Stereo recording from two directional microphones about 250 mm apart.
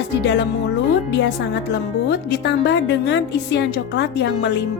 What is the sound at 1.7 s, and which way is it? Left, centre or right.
Speech, left.